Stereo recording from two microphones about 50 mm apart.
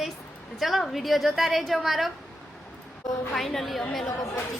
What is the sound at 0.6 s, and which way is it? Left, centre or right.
A woman's voice, centre.